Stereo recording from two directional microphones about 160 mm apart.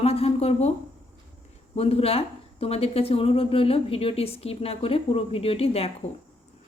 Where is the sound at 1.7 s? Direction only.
40° left (ahead or behind).